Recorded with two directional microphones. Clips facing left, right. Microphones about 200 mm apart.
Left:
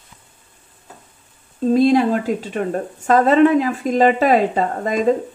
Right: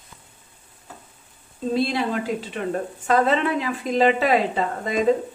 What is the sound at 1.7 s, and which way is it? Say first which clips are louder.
A woman's voice: left 9 dB; 45° left (ahead or behind).